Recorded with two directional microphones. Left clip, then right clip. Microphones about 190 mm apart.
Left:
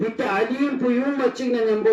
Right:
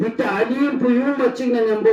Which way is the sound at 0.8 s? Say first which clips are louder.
Right 3 dB; 45° right (ahead or behind).